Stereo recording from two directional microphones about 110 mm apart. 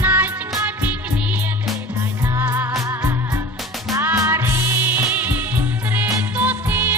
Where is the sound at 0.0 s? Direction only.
15° right (ahead or behind).